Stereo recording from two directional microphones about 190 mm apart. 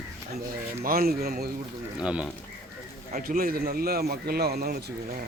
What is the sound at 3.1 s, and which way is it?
A man's voice, 50° right (ahead or behind).